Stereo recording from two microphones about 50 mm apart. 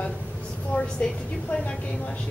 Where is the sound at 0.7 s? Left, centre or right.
Left.